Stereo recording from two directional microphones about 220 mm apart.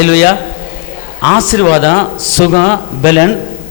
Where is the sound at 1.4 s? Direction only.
10° left (ahead or behind).